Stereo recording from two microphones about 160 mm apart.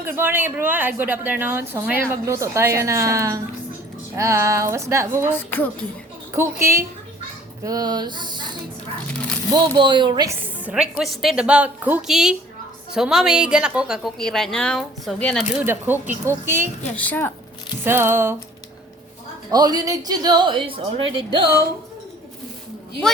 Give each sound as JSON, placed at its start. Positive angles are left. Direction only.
{"t": 0.0, "sound": "a woman's voice", "side_deg": -15}
{"t": 5.3, "sound": "a woman's voice", "side_deg": 15}
{"t": 6.3, "sound": "a woman's voice", "side_deg": -15}
{"t": 9.1, "sound": "a sound", "side_deg": 5}
{"t": 9.5, "sound": "a woman's voice", "side_deg": -30}
{"t": 10.4, "sound": "a woman's voice", "side_deg": -5}
{"t": 15.6, "sound": "a woman's voice", "side_deg": -15}
{"t": 16.9, "sound": "a woman's voice", "side_deg": 10}
{"t": 17.8, "sound": "a woman's voice", "side_deg": -15}
{"t": 19.5, "sound": "a woman's voice", "side_deg": -25}